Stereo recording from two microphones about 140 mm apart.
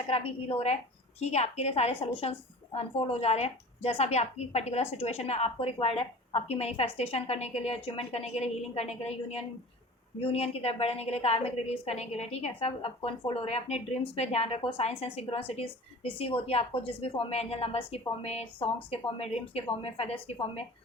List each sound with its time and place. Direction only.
0.1 s a woman's voice: 45° left (ahead or behind)